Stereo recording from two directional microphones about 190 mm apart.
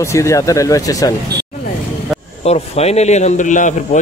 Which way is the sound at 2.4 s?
35° left (ahead or behind).